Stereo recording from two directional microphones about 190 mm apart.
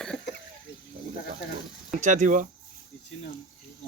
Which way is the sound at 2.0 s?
40° right (ahead or behind).